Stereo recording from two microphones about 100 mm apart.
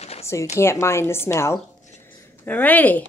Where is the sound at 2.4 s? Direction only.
15° left (ahead or behind).